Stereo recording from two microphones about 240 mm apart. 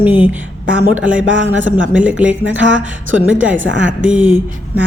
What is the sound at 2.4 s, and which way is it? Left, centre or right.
Speech, right.